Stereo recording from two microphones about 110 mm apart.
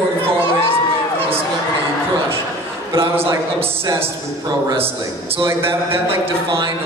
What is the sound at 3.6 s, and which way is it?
Speech, 25° right (ahead or behind).